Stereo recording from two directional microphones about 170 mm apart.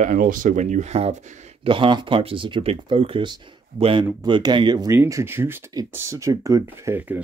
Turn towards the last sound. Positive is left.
turn(degrees=-10)  # may be behind; listen again after turning